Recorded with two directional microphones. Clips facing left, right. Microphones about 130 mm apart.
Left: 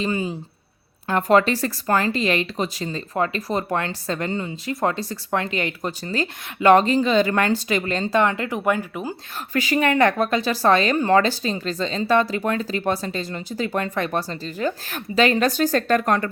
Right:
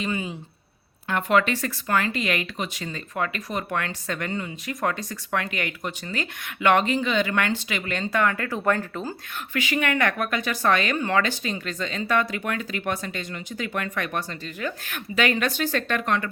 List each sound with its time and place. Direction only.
0.0 s speech: 35° left (ahead or behind); by 9.1 s 10° left (ahead or behind)
9.5 s speech: 40° left (ahead or behind)